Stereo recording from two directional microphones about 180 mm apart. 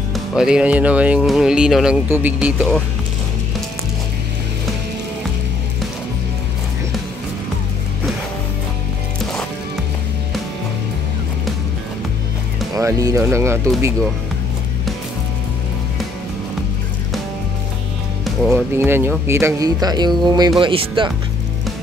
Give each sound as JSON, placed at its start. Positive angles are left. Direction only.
{"t": 0.1, "sound": "speech", "side_deg": 0}
{"t": 2.3, "sound": "speech", "side_deg": 0}
{"t": 12.7, "sound": "speech", "side_deg": -20}
{"t": 18.2, "sound": "music", "side_deg": 0}
{"t": 18.7, "sound": "speech", "side_deg": -15}